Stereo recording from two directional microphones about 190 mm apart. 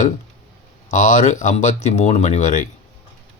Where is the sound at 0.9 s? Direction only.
40° left (ahead or behind).